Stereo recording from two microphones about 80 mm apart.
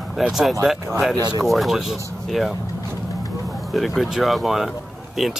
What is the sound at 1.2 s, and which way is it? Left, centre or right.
Speech, right.